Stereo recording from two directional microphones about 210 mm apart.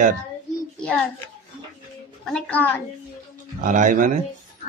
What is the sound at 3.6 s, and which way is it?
Speech, 40° right (ahead or behind).